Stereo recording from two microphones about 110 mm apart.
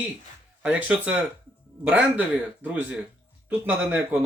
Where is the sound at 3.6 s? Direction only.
15° right (ahead or behind).